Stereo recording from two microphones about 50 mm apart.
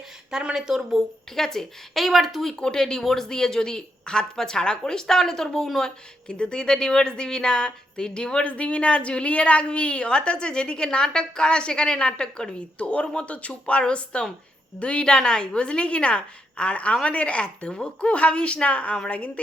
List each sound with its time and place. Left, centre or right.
0.5 s a woman's voice: centre
1.4 s speech: centre
2.6 s speech: centre
6.2 s a woman's voice: centre
12.8 s a woman's voice: left